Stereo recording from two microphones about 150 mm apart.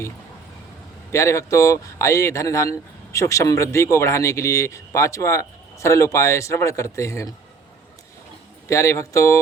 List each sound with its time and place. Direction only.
1.1 s speech: 20° left (ahead or behind)
8.7 s speech: 20° left (ahead or behind)